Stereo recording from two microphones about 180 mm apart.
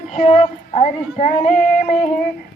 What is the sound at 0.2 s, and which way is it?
Child singing, 35° left (ahead or behind).